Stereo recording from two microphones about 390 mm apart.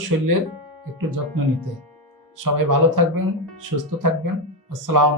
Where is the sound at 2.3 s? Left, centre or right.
Right.